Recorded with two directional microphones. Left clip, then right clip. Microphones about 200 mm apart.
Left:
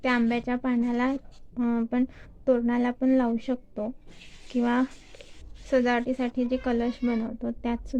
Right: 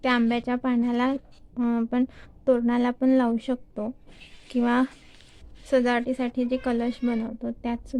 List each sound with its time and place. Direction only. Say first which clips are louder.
0.0 s speech: right 2 dB; 10° right (ahead or behind)